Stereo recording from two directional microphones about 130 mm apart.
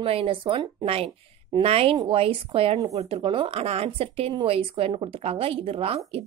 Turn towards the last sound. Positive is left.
turn(degrees=-50)  # may be behind; listen again after turning